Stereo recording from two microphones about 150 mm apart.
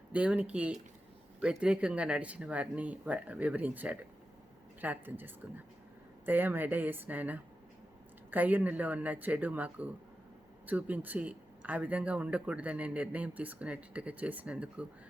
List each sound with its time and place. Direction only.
0.1 s speech: 10° right (ahead or behind)